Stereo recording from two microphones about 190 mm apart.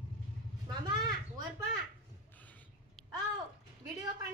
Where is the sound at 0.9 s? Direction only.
20° right (ahead or behind).